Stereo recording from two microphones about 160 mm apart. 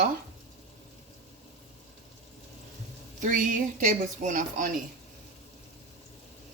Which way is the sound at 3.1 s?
55° right (ahead or behind).